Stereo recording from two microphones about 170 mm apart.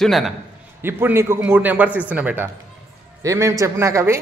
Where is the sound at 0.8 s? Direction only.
15° right (ahead or behind).